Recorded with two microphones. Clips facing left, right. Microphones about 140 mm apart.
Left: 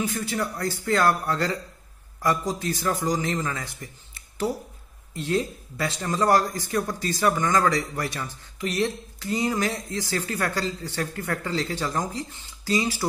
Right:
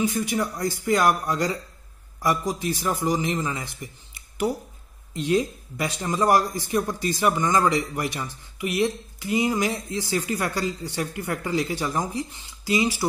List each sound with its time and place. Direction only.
0.0 s speech: 15° right (ahead or behind)